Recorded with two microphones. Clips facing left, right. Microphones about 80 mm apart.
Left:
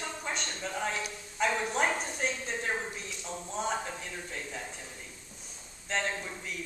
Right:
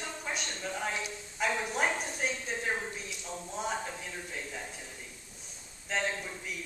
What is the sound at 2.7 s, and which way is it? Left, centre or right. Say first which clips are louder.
Speech: even; centre.